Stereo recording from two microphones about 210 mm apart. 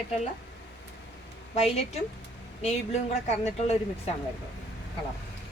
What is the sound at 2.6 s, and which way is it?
Speech, 30° left (ahead or behind).